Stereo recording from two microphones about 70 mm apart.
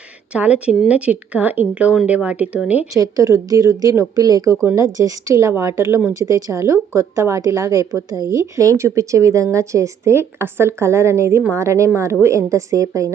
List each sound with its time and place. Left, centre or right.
0.3 s speech: centre
2.9 s speech: right
6.1 s speech: right